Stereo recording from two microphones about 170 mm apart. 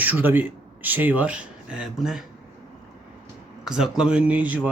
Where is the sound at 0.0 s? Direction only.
10° right (ahead or behind).